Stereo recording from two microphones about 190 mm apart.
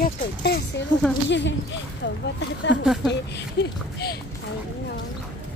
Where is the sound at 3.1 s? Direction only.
60° left (ahead or behind).